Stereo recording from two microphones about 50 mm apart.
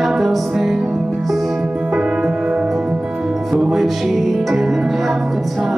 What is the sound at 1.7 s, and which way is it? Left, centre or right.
Music, centre.